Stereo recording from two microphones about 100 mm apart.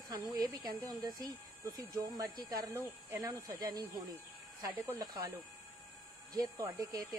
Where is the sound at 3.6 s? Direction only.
40° right (ahead or behind).